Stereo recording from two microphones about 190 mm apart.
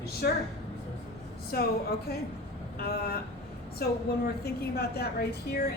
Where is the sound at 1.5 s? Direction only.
55° left (ahead or behind).